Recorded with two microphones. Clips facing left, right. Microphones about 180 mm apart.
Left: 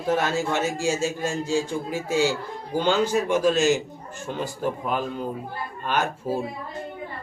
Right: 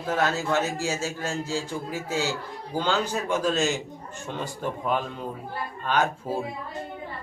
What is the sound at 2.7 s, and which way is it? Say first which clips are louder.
A man's voice: left 5 dB; 15° left (ahead or behind).